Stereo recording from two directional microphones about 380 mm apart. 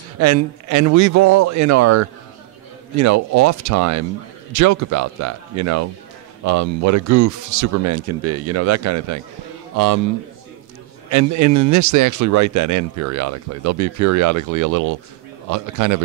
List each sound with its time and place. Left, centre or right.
0.2 s speech: right
11.1 s speech: right